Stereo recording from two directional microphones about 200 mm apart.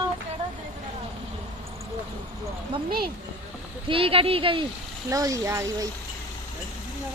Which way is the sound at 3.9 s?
25° right (ahead or behind).